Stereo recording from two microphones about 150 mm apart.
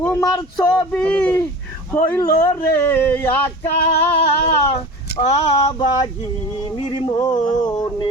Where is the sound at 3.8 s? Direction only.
90° left.